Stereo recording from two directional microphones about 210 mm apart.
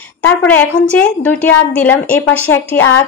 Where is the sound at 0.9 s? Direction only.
5° left (ahead or behind).